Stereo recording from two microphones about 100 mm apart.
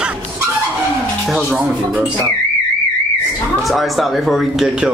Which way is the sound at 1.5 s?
10° right (ahead or behind).